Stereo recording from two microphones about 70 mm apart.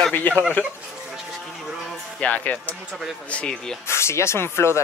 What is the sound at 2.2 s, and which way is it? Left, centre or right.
Speech, left.